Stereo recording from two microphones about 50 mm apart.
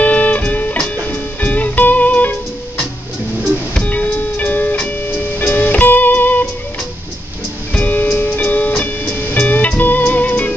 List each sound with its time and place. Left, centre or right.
0.0 s music: left
3.8 s music: left
7.7 s music: left